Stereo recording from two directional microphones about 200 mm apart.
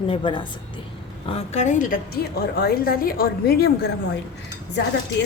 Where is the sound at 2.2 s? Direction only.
50° left (ahead or behind).